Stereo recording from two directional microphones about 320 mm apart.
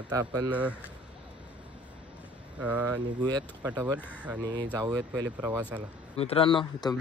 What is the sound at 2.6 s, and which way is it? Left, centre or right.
Speech, centre.